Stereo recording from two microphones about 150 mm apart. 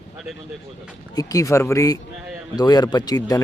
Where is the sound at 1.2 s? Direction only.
25° left (ahead or behind).